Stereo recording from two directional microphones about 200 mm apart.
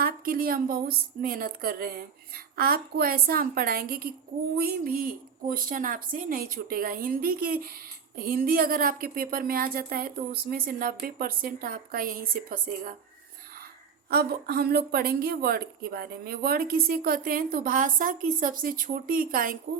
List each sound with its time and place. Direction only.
0.0 s speech: 45° right (ahead or behind)
14.1 s speech: 50° right (ahead or behind)